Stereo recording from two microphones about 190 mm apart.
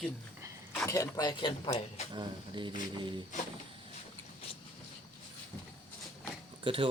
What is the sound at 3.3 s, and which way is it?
Speech, 40° left (ahead or behind).